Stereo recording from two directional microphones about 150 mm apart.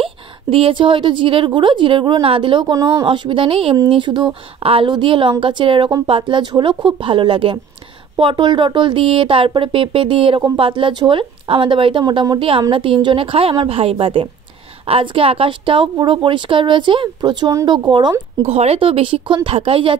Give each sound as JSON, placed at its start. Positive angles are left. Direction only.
{"t": 0.0, "sound": "speech", "side_deg": -40}
{"t": 18.4, "sound": "speech", "side_deg": -45}